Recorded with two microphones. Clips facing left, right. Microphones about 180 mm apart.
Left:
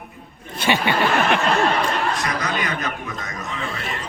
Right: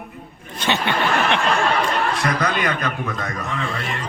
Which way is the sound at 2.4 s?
55° right (ahead or behind).